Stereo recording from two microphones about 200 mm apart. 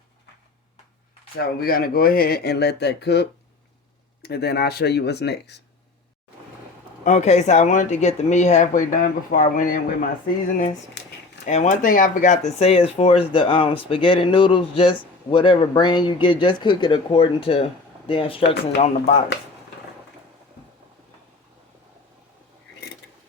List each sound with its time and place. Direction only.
1.4 s speech: 50° left (ahead or behind)
7.0 s speech: 35° left (ahead or behind)
11.4 s speech: 35° left (ahead or behind)